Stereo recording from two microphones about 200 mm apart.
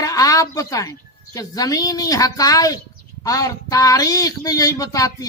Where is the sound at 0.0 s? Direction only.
15° left (ahead or behind).